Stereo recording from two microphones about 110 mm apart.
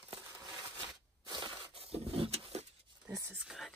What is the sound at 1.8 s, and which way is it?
Vehicle, 60° right (ahead or behind).